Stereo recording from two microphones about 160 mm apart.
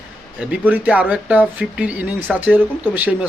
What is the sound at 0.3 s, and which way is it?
Speech, 10° right (ahead or behind).